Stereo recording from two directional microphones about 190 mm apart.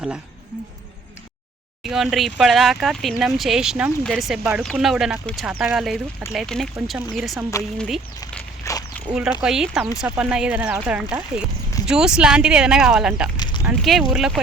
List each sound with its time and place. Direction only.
1.8 s speech: centre (ahead or behind)
8.7 s speech: 15° left (ahead or behind)
9.0 s speech: 5° right (ahead or behind)
13.3 s a sound: 20° left (ahead or behind)
13.7 s speech: centre (ahead or behind)